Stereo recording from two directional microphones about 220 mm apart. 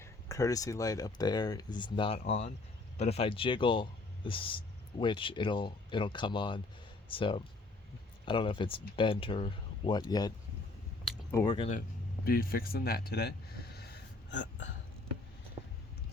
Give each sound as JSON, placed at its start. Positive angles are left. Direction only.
{"t": 0.0, "sound": "speech", "side_deg": 15}
{"t": 11.0, "sound": "a sound", "side_deg": 10}
{"t": 12.2, "sound": "speech", "side_deg": 45}
{"t": 13.7, "sound": "gasp", "side_deg": 45}